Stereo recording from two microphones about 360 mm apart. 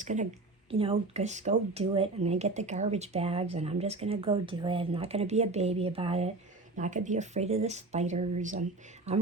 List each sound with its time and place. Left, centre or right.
0.0 s a woman's voice: centre